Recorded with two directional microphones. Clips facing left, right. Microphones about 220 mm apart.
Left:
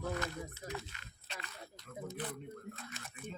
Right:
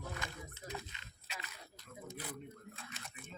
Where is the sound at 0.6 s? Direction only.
45° left (ahead or behind).